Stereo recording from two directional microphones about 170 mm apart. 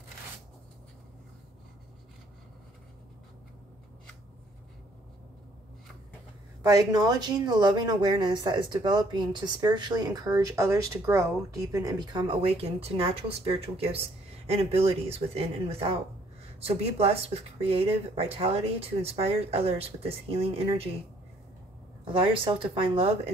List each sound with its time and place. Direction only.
6.6 s speech: 20° right (ahead or behind)
22.0 s speech: 30° right (ahead or behind)